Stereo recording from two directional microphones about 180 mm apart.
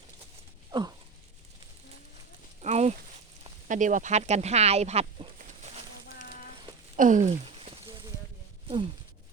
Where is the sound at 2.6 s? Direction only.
40° right (ahead or behind).